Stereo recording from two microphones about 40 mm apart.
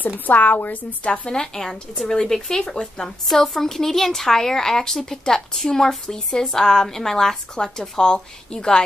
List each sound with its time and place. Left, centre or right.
0.3 s speech: left
1.0 s speech: left
1.3 s a woman's voice: centre